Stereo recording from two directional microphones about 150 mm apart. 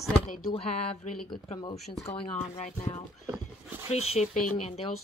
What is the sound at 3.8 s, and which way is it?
Speech, 45° left (ahead or behind).